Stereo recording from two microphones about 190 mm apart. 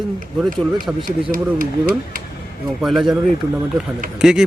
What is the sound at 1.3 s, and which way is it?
Speech, 45° right (ahead or behind).